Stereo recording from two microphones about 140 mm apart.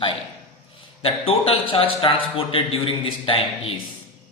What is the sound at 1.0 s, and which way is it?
A man's voice, 40° left (ahead or behind).